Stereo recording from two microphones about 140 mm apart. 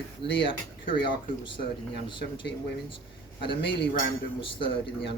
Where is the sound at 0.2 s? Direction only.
40° left (ahead or behind).